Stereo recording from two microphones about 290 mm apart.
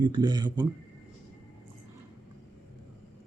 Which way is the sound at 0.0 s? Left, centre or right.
Centre.